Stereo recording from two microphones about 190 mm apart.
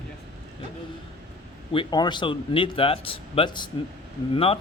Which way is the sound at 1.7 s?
25° left (ahead or behind).